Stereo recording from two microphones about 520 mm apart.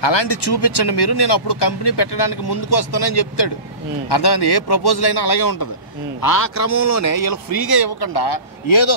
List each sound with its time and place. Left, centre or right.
0.0 s speech: left